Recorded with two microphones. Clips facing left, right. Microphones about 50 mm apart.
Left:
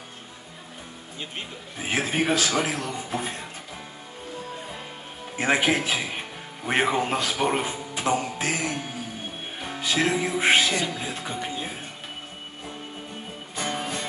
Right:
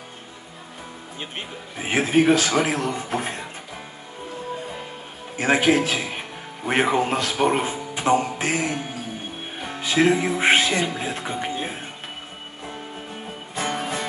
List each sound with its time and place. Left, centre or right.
1.8 s speech: centre
2.0 s a man's voice: centre
2.6 s speech: right
3.0 s speech: right
5.7 s speech: centre
7.9 s music: right
8.4 s speech: right
9.6 s music: centre
9.8 s a man's voice: centre
10.4 s speech: right
13.6 s music: centre